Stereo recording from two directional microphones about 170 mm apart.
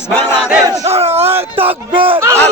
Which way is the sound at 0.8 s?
35° right (ahead or behind).